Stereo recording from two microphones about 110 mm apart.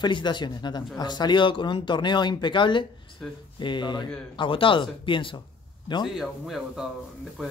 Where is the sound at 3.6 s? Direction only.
45° left (ahead or behind).